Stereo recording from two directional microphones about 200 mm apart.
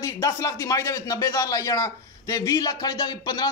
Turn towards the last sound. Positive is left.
turn(degrees=20)  # may be behind; listen again after turning